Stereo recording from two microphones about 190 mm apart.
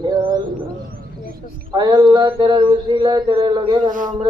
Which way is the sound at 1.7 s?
20° right (ahead or behind).